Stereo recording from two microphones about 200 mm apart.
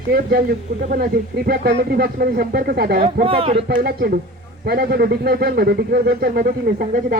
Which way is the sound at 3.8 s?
50° right (ahead or behind).